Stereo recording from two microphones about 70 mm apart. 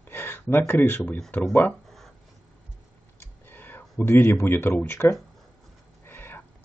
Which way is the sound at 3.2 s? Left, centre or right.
Left.